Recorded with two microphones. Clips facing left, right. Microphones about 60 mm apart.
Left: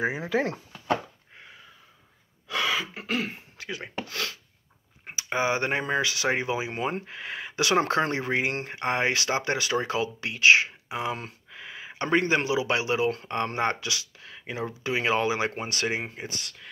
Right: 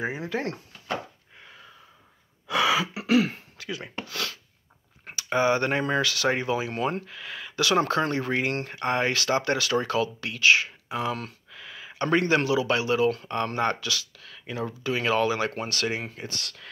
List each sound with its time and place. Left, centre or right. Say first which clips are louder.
0.0 s speech: left 2 dB; centre
2.4 s throat clearing: right 4 dB; centre
3.5 s a sound: even; left
5.0 s speech: right 3 dB; centre